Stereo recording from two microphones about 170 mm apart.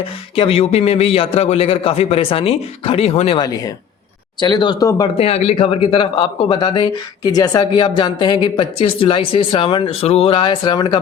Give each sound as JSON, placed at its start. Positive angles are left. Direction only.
{"t": 0.3, "sound": "a man's voice", "side_deg": 35}
{"t": 5.1, "sound": "a man's voice", "side_deg": 35}